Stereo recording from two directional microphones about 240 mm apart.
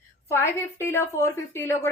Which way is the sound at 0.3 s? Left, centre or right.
Centre.